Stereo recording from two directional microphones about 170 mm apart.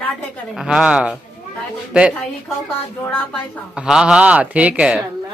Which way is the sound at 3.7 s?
5° right (ahead or behind).